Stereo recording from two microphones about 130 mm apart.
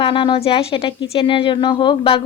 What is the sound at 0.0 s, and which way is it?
A woman's voice, 40° left (ahead or behind).